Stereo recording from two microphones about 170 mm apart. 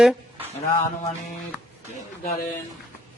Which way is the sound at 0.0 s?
Centre (ahead or behind).